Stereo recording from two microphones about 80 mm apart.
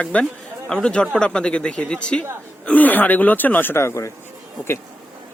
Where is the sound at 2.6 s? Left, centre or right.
Left.